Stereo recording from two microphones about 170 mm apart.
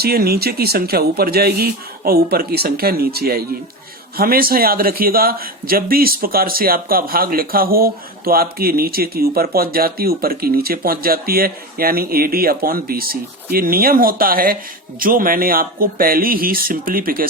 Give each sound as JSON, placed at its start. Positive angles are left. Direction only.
{"t": 0.0, "sound": "a man's voice", "side_deg": -65}